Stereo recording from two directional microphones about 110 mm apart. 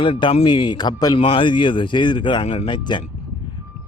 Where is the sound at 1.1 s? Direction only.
50° left (ahead or behind).